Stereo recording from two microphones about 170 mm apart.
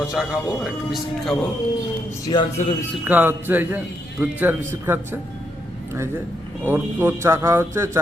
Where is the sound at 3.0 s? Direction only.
10° right (ahead or behind).